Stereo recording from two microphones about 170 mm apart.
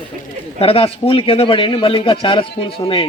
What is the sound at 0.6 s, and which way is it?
A man's voice, 35° left (ahead or behind).